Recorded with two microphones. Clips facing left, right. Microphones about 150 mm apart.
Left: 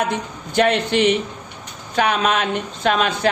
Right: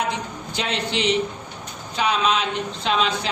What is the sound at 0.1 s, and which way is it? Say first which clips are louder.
A man's voice: left 3 dB; 55° left (ahead or behind).